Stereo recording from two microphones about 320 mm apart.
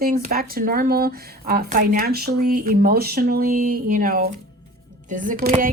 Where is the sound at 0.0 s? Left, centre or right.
Right.